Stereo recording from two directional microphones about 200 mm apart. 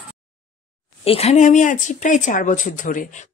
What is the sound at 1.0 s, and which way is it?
Speech, 30° left (ahead or behind).